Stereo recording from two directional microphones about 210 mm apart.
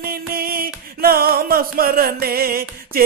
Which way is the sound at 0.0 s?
45° right (ahead or behind).